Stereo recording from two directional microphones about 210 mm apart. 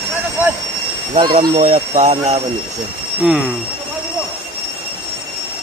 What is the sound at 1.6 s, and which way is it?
Speech, 35° right (ahead or behind).